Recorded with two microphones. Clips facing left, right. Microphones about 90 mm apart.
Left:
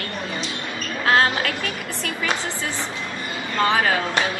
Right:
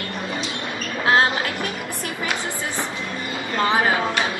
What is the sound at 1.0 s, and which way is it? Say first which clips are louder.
Music: even; 25° right (ahead or behind).